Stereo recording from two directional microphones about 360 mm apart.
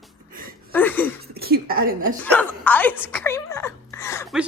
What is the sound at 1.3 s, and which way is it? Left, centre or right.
Speech, right.